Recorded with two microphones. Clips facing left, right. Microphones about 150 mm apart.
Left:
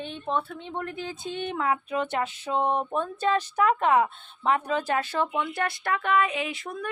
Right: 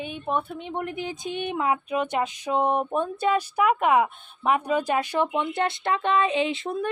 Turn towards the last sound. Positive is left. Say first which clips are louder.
# right 7 dB
turn(degrees=-25)  # may be behind; listen again after turning